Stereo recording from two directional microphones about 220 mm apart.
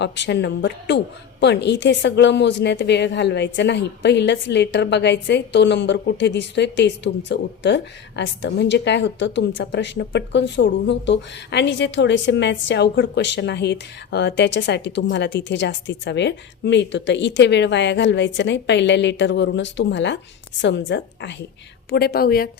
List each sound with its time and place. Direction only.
0.0 s a woman's voice: 50° left (ahead or behind)